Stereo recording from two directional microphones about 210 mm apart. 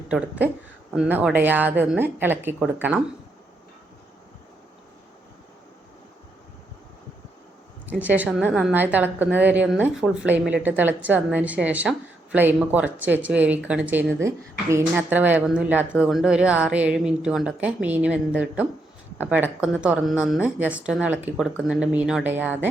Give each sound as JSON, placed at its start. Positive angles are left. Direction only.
{"t": 0.1, "sound": "a woman's voice", "side_deg": -5}
{"t": 8.0, "sound": "a woman's voice", "side_deg": -5}